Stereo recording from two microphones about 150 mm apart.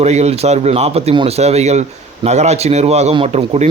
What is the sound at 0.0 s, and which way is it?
Speech, 45° right (ahead or behind).